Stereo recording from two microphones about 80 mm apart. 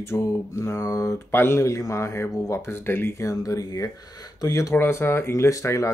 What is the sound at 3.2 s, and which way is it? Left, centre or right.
Speech, left.